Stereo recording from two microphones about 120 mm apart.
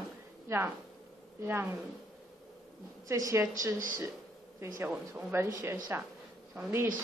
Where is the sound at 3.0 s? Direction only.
25° right (ahead or behind).